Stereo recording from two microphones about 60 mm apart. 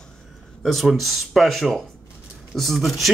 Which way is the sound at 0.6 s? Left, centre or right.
Centre.